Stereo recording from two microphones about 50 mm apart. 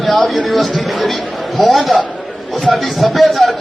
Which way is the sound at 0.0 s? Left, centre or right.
Centre.